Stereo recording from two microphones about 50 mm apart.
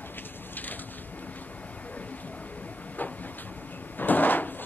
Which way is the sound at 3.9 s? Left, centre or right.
Left.